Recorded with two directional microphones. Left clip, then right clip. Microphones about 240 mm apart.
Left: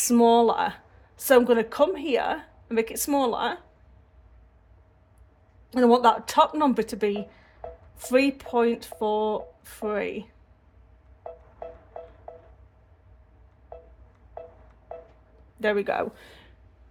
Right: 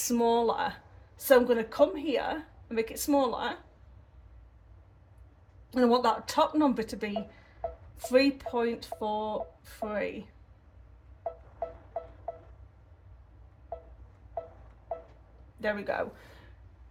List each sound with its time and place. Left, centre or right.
0.0 s a woman's voice: left
5.7 s a woman's voice: left
15.6 s a woman's voice: left